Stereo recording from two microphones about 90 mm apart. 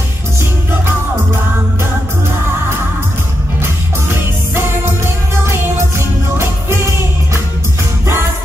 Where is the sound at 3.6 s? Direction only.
30° right (ahead or behind).